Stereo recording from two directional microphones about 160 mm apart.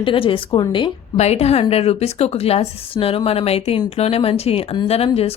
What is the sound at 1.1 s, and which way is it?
Speech, 45° left (ahead or behind).